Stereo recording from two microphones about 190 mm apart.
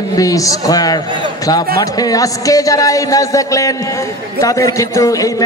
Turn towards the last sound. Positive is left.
turn(degrees=20)  # may be behind; listen again after turning